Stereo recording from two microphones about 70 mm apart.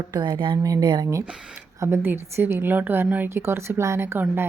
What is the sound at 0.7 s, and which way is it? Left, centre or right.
Speech, right.